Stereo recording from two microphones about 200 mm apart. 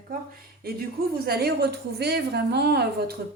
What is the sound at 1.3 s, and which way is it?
Speech, 50° right (ahead or behind).